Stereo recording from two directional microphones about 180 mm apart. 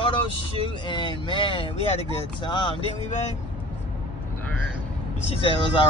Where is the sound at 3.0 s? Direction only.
40° left (ahead or behind).